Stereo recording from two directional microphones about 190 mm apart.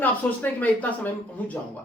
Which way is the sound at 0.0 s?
10° left (ahead or behind).